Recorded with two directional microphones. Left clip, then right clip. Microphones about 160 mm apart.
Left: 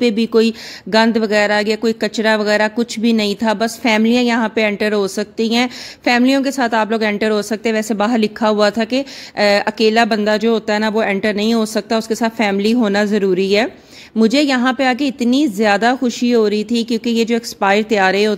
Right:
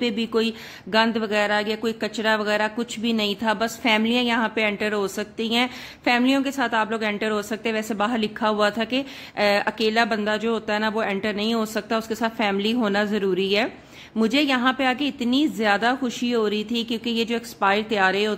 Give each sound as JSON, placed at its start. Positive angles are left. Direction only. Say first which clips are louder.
{"t": 0.0, "sound": "speech", "louder": "left 9 dB", "side_deg": 40}